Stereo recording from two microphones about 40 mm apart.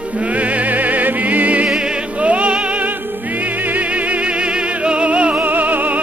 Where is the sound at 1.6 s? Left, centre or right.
Right.